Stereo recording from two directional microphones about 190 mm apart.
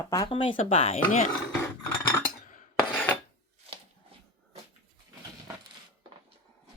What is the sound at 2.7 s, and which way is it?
Filing, 5° left (ahead or behind).